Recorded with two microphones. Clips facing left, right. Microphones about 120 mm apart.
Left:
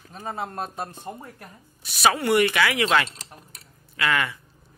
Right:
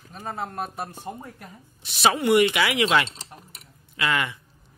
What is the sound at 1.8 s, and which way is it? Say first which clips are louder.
Speech: right 1 dB; 25° right (ahead or behind).